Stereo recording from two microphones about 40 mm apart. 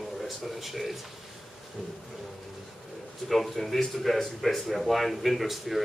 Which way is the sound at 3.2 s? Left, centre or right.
Centre.